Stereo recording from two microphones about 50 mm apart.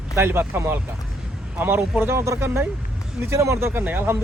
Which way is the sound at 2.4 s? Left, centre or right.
Right.